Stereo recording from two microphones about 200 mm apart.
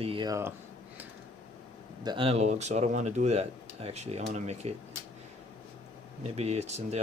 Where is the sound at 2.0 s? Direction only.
25° right (ahead or behind).